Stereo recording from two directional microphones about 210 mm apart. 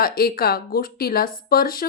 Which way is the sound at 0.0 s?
45° left (ahead or behind).